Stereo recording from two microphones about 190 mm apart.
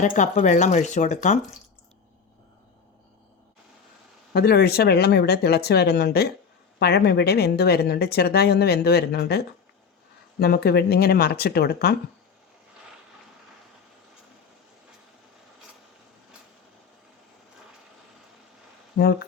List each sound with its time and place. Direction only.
0.0 s speech: 40° left (ahead or behind)
4.4 s speech: 55° left (ahead or behind)